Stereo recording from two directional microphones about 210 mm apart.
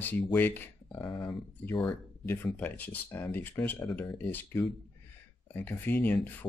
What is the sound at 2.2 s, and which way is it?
Speech, 10° left (ahead or behind).